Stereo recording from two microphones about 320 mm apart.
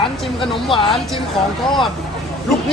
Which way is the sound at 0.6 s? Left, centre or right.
Centre.